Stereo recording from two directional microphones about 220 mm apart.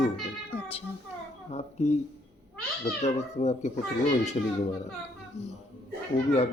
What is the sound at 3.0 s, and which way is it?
A child's voice, 30° left (ahead or behind).